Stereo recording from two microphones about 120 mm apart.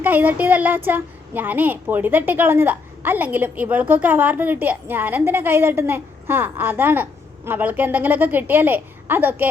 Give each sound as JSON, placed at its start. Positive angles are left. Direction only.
{"t": 0.0, "sound": "a woman's voice", "side_deg": -15}